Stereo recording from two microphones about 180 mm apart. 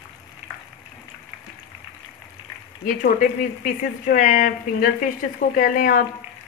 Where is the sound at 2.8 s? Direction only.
50° left (ahead or behind).